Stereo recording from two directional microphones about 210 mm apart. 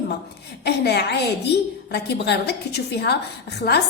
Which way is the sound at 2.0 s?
55° left (ahead or behind).